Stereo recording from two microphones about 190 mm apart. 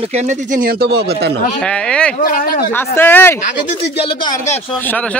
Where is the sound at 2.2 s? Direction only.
50° left (ahead or behind).